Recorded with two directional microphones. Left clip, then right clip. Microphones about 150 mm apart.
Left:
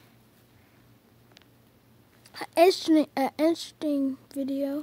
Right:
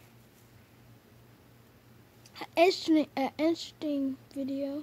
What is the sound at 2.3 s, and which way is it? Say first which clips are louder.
A child's voice: left 4 dB; 25° left (ahead or behind).